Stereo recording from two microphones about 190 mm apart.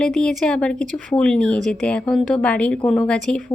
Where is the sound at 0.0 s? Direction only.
5° left (ahead or behind).